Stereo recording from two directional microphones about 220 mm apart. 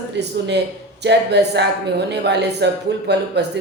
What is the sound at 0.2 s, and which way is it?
Speech, 50° right (ahead or behind).